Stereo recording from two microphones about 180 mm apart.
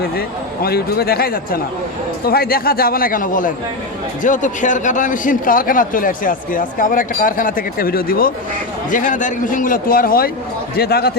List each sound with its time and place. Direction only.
0.0 s a man's voice: 60° left (ahead or behind)